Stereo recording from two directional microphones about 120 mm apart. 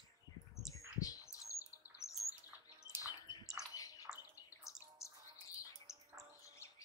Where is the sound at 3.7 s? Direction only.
30° left (ahead or behind).